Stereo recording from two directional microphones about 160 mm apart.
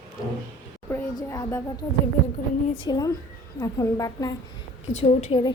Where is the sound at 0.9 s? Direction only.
15° left (ahead or behind).